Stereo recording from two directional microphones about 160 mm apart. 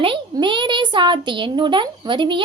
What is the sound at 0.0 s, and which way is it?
A child's voice, 30° right (ahead or behind).